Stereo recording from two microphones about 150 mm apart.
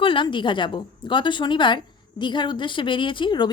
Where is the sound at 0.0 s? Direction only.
35° left (ahead or behind).